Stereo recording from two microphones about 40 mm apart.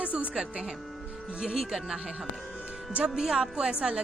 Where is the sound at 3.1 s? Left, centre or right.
Centre.